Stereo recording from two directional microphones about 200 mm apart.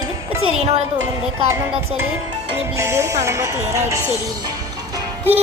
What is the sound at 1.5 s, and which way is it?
Speech, 10° right (ahead or behind).